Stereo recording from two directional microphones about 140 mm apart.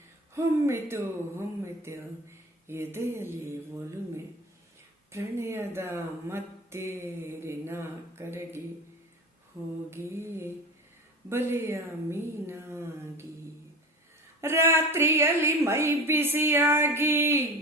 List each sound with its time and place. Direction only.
0.3 s speech: 20° right (ahead or behind)
5.1 s speech: 20° right (ahead or behind)
9.9 s speech: 20° right (ahead or behind)
14.4 s speech: 20° right (ahead or behind)